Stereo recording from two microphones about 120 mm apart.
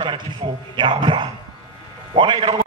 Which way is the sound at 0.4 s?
50° right (ahead or behind).